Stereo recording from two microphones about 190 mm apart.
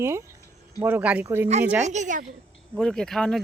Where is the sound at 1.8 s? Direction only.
40° right (ahead or behind).